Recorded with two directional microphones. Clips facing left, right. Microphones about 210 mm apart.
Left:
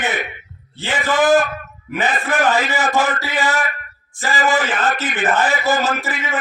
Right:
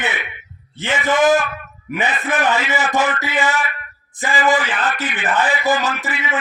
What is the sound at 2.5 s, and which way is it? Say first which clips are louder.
A man's voice: left 1 dB; 40° left (ahead or behind).